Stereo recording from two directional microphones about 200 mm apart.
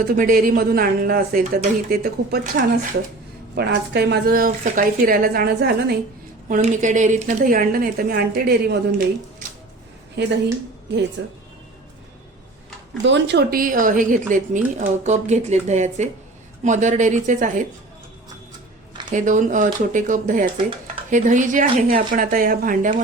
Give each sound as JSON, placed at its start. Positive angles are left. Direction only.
{"t": 0.2, "sound": "speech", "side_deg": -45}
{"t": 6.5, "sound": "speech", "side_deg": -35}
{"t": 10.2, "sound": "speech", "side_deg": -60}
{"t": 13.0, "sound": "a woman's voice", "side_deg": -65}
{"t": 19.1, "sound": "a woman's voice", "side_deg": -40}
{"t": 20.6, "sound": "speech", "side_deg": -25}
{"t": 21.1, "sound": "a woman's voice", "side_deg": -40}